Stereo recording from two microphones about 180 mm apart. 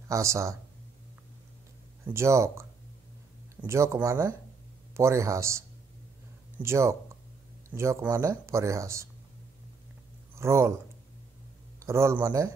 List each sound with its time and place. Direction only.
0.1 s speech: 15° right (ahead or behind)
2.0 s speech: 15° right (ahead or behind)
3.6 s speech: 15° right (ahead or behind)
6.6 s speech: 15° right (ahead or behind)
10.3 s speech: 15° right (ahead or behind)
11.8 s speech: 15° right (ahead or behind)